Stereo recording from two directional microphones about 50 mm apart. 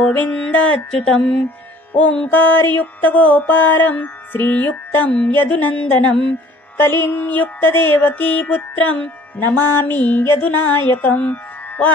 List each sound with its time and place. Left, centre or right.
0.0 s mantra: left
0.9 s speech: centre
2.3 s mantra: left
6.8 s mantra: left
9.6 s mantra: left
10.4 s music: left